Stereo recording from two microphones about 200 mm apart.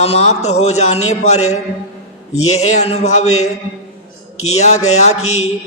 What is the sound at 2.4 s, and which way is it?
Speech, 35° left (ahead or behind).